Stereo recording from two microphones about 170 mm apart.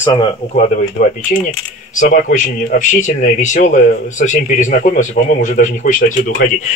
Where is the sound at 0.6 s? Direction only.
50° left (ahead or behind).